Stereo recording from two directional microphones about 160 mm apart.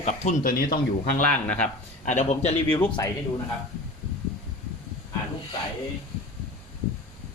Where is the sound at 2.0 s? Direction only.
45° left (ahead or behind).